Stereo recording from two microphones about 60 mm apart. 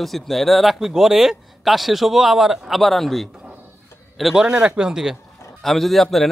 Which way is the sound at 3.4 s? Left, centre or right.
Right.